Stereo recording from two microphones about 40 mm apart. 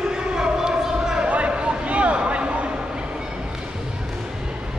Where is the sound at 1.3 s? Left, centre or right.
Right.